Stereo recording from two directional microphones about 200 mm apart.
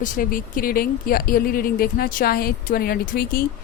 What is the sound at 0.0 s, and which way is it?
Speech, 45° left (ahead or behind).